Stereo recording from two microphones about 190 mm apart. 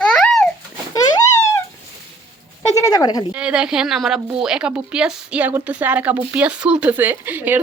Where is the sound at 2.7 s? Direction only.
15° left (ahead or behind).